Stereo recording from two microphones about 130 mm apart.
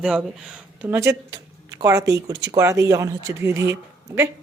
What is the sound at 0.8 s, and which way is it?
Speech, 20° right (ahead or behind).